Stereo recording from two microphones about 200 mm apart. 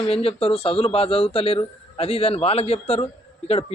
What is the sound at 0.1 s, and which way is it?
Speech, 30° left (ahead or behind).